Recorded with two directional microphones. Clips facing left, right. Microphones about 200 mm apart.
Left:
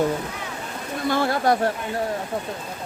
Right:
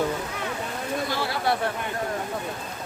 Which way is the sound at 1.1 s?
50° left (ahead or behind).